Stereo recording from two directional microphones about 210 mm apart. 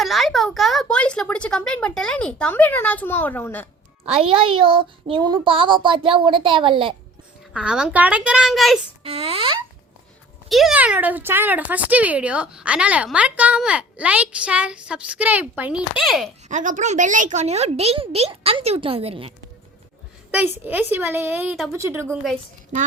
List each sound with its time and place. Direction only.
0.0 s speech: centre (ahead or behind)
4.0 s speech: 30° right (ahead or behind)
7.5 s speech: 5° right (ahead or behind)
9.0 s speech: 30° right (ahead or behind)
10.5 s speech: centre (ahead or behind)
16.5 s speech: 35° right (ahead or behind)
20.3 s a woman's voice: 10° right (ahead or behind)
22.0 s speech: centre (ahead or behind)